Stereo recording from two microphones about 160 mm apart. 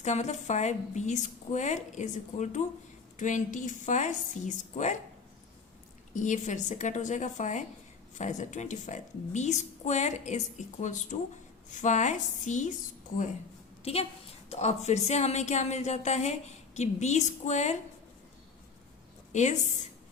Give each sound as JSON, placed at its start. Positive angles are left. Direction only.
{"t": 0.0, "sound": "a woman's voice", "side_deg": 45}
{"t": 6.1, "sound": "a woman's voice", "side_deg": 50}
{"t": 13.8, "sound": "a woman's voice", "side_deg": 40}
{"t": 19.3, "sound": "a woman's voice", "side_deg": 45}